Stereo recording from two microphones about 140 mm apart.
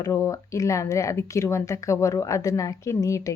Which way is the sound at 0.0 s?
20° left (ahead or behind).